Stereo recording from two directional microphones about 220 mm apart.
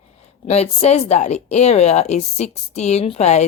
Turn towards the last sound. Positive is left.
turn(degrees=30)  # may be behind; listen again after turning